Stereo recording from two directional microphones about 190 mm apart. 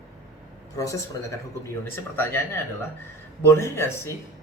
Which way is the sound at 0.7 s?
15° left (ahead or behind).